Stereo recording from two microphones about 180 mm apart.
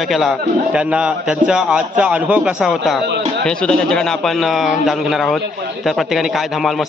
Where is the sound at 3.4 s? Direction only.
5° left (ahead or behind).